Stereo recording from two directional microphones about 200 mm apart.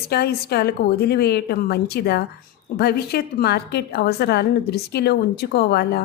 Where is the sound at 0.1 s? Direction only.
50° left (ahead or behind).